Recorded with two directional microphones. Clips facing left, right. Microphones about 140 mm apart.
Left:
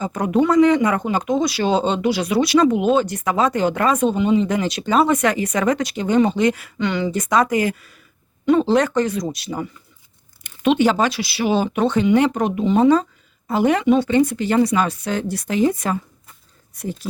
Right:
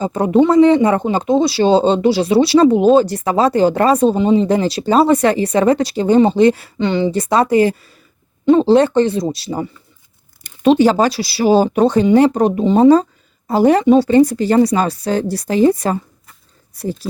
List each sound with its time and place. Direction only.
0.0 s speech: 30° right (ahead or behind)